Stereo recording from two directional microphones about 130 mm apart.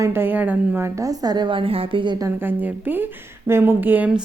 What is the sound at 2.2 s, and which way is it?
Speech, 15° right (ahead or behind).